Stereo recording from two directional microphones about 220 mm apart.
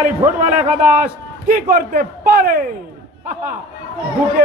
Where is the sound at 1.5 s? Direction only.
40° right (ahead or behind).